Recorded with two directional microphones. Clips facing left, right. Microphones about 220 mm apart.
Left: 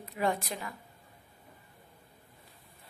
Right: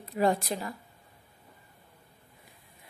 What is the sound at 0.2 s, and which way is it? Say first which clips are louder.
Speech: right 5 dB; 35° right (ahead or behind).